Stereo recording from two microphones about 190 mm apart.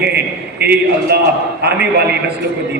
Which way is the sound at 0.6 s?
60° right (ahead or behind).